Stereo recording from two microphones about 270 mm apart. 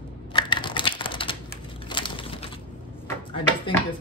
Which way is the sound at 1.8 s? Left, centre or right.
Centre.